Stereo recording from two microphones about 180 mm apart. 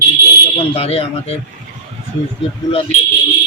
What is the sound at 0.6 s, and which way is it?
Speech, 35° left (ahead or behind).